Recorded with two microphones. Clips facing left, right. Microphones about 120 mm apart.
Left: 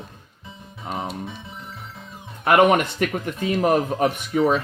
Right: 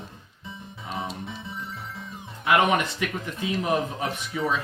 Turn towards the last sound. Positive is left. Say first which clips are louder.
# left 7 dB
turn(degrees=60)  # may be behind; listen again after turning